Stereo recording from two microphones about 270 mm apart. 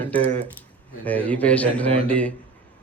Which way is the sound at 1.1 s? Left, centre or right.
Centre.